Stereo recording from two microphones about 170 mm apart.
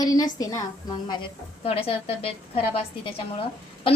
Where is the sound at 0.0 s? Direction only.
20° left (ahead or behind).